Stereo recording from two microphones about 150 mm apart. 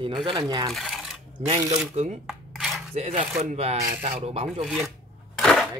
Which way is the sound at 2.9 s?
45° right (ahead or behind).